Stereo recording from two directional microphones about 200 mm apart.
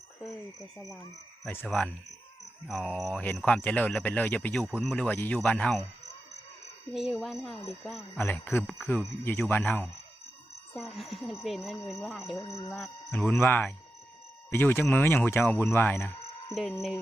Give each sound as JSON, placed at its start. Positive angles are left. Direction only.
{"t": 1.6, "sound": "speech", "side_deg": 5}
{"t": 6.9, "sound": "speech", "side_deg": 0}
{"t": 8.1, "sound": "speech", "side_deg": 10}
{"t": 12.4, "sound": "speech", "side_deg": 15}
{"t": 16.6, "sound": "speech", "side_deg": 0}